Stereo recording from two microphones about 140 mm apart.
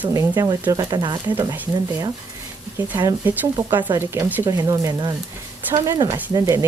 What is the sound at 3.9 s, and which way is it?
Speech, 20° right (ahead or behind).